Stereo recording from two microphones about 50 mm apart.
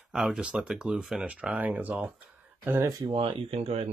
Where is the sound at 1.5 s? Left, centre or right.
Right.